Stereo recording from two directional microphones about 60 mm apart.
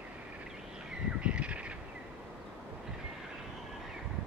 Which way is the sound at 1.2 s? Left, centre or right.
Centre.